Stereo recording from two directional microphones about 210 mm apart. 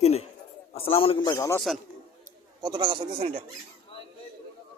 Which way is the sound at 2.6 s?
20° right (ahead or behind).